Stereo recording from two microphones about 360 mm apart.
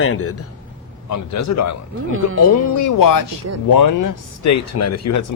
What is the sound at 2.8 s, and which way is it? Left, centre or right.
Speech, left.